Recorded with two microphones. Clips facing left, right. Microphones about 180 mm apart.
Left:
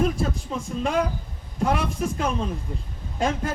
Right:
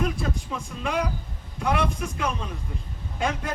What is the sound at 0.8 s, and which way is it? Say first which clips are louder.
A man's voice: left 3 dB; 45° left (ahead or behind).